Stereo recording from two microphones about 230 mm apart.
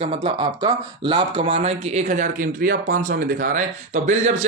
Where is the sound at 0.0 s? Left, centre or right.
Right.